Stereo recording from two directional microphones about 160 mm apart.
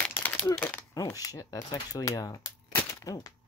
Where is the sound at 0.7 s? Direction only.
20° left (ahead or behind).